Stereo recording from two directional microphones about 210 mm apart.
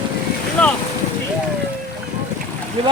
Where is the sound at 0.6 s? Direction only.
5° left (ahead or behind).